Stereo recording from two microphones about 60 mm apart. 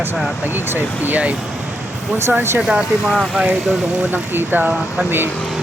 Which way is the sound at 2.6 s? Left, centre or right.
Centre.